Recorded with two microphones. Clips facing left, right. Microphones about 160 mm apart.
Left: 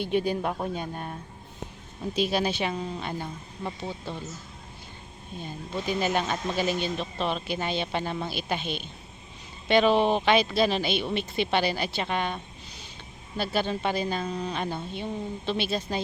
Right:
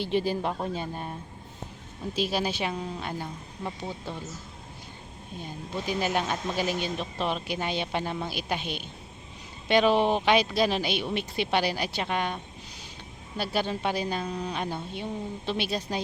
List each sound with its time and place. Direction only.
0.0 s speech: 55° left (ahead or behind)
0.3 s speech: centre (ahead or behind)
2.3 s speech: 10° right (ahead or behind)
3.8 s speech: 15° right (ahead or behind)
5.4 s speech: 10° right (ahead or behind)